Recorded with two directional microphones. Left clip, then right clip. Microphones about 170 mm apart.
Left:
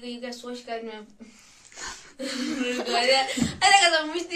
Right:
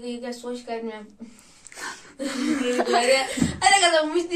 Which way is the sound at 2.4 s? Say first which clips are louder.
Right 6 dB; 30° right (ahead or behind).